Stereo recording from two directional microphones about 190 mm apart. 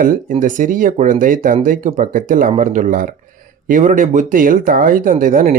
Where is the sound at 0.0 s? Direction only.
45° right (ahead or behind).